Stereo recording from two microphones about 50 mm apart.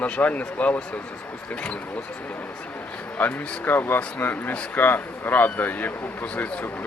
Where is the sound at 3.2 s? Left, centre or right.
Left.